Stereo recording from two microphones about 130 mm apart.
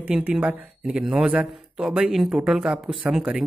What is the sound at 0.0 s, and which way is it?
Speech, 10° right (ahead or behind).